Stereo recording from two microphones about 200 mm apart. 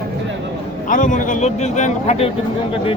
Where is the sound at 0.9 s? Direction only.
40° left (ahead or behind).